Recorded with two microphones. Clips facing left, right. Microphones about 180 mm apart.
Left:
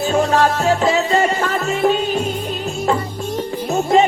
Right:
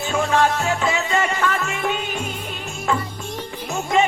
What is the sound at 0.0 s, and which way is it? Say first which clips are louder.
Music: left 4 dB; 40° left (ahead or behind).